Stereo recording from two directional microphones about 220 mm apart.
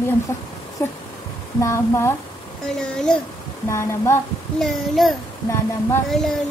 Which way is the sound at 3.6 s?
15° left (ahead or behind).